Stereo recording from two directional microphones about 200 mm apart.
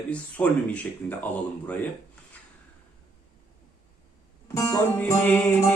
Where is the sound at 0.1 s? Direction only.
5° left (ahead or behind).